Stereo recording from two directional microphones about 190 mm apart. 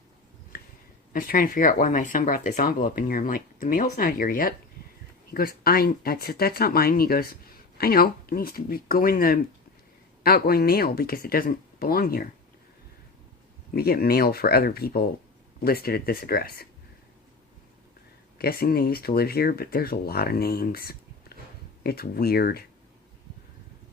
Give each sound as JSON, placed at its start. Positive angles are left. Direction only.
{"t": 1.1, "sound": "speech", "side_deg": 50}
{"t": 13.7, "sound": "speech", "side_deg": 55}
{"t": 18.3, "sound": "speech", "side_deg": 55}